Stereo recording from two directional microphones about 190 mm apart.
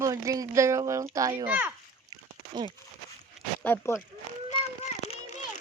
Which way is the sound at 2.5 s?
25° right (ahead or behind).